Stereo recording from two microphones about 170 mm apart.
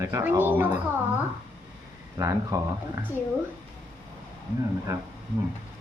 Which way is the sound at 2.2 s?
20° right (ahead or behind).